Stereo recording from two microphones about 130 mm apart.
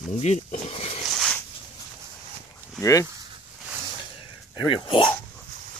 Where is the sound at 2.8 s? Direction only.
25° left (ahead or behind).